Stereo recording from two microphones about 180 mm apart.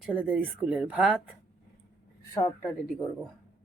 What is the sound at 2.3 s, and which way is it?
Speech, 10° left (ahead or behind).